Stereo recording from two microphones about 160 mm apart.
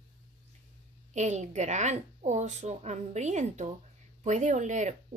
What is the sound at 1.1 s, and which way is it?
Speech, 50° right (ahead or behind).